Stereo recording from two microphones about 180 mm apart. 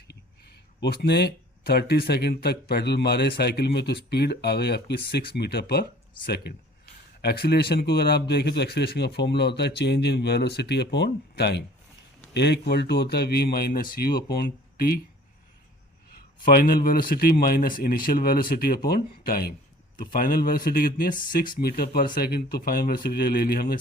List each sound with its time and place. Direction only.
0.1 s speech: 65° left (ahead or behind)
16.4 s speech: 50° left (ahead or behind)